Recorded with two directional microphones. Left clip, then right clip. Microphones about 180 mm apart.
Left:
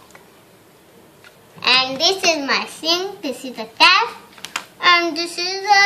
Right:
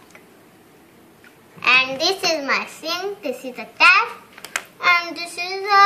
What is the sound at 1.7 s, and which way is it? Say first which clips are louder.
Speech: left 1 dB; 20° right (ahead or behind).